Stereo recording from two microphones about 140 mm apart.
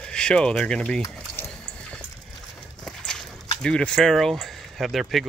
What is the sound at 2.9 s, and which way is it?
Horse, 5° left (ahead or behind).